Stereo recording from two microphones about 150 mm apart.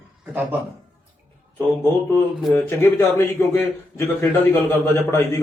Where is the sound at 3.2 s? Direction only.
15° left (ahead or behind).